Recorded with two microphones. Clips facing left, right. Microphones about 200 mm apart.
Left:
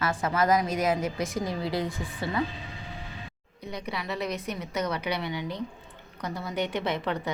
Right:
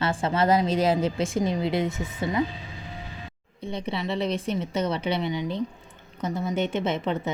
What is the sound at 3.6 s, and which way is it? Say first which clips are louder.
A woman's voice: right 5 dB; 25° right (ahead or behind).